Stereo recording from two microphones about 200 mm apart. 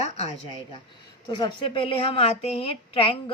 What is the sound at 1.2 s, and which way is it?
A woman's voice, 20° left (ahead or behind).